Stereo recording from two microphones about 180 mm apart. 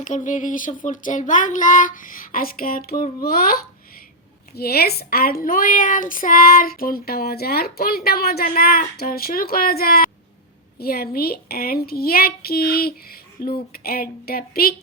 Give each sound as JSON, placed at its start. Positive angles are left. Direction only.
{"t": 0.0, "sound": "child singing", "side_deg": 45}
{"t": 4.5, "sound": "a woman's voice", "side_deg": 60}